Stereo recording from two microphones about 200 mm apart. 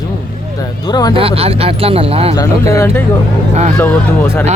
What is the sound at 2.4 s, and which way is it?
Speech, 15° left (ahead or behind).